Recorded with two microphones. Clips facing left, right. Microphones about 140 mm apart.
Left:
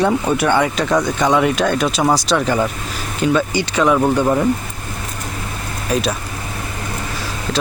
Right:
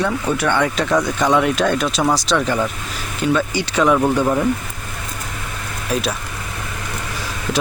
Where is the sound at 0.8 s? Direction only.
Centre (ahead or behind).